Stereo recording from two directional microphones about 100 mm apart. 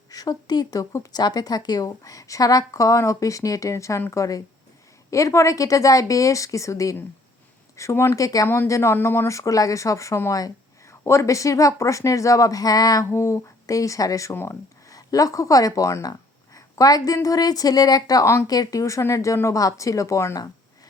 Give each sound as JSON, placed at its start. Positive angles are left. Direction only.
{"t": 0.1, "sound": "speech", "side_deg": 40}
{"t": 13.1, "sound": "speech", "side_deg": 30}
{"t": 16.6, "sound": "a sound", "side_deg": 35}
{"t": 17.2, "sound": "speech", "side_deg": 40}